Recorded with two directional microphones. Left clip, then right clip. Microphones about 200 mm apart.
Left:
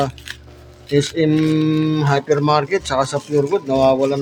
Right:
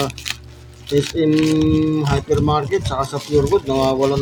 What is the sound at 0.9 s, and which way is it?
Speech, 35° left (ahead or behind).